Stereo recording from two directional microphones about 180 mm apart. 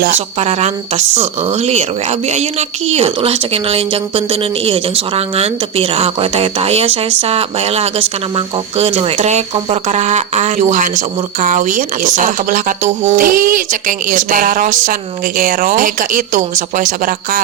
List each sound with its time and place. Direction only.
0.1 s a woman's voice: 40° right (ahead or behind)